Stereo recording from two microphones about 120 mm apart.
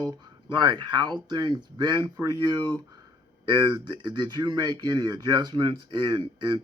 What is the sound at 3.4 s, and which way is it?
Speech, 40° right (ahead or behind).